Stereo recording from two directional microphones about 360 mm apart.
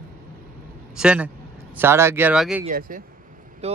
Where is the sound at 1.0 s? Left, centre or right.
Centre.